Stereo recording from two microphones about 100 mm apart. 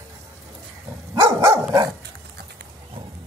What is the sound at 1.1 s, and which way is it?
Dog, 30° right (ahead or behind).